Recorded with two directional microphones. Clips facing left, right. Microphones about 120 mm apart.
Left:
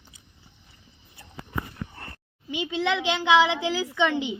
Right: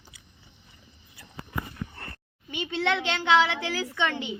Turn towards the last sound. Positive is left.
turn(degrees=15)  # may be behind; listen again after turning